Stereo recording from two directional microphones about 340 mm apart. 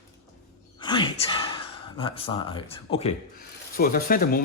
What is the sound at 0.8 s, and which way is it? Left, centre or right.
Gasp, centre.